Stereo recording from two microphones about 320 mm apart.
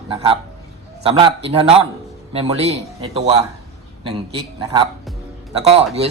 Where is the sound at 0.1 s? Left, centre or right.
Centre.